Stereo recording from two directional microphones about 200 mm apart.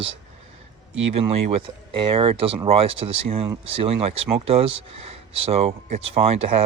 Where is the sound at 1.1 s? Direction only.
30° right (ahead or behind).